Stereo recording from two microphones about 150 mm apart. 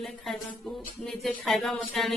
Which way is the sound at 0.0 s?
Centre (ahead or behind).